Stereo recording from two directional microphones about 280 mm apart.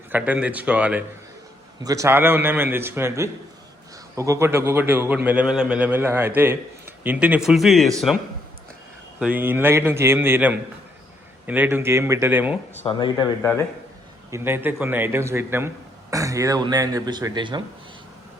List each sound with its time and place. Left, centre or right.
0.1 s a man's voice: centre
9.1 s a man's voice: centre
12.8 s speech: centre
14.3 s a man's voice: centre